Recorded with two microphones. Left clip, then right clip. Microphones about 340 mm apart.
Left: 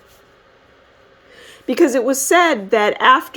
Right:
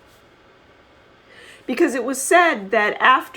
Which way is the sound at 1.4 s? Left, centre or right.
Left.